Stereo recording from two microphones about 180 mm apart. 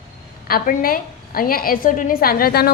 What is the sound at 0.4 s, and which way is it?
A woman's voice, 50° left (ahead or behind).